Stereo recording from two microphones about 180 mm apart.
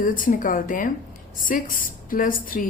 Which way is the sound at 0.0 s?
50° left (ahead or behind).